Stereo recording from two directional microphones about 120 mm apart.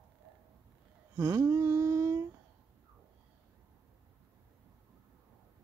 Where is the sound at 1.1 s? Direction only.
25° right (ahead or behind).